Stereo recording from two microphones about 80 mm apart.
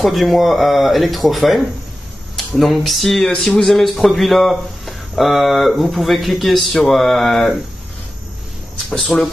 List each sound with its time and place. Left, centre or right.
0.0 s speech: centre
8.9 s speech: centre